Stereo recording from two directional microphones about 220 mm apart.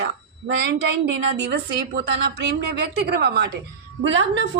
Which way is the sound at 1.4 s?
50° right (ahead or behind).